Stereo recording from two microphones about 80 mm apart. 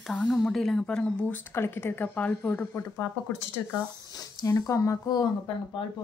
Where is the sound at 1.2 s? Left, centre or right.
Left.